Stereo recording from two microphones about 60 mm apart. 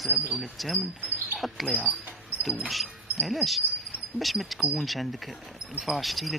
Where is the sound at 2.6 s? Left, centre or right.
Centre.